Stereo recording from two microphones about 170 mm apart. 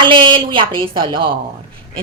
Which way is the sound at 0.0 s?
30° right (ahead or behind).